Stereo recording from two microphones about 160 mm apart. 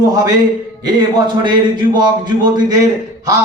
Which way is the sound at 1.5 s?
30° right (ahead or behind).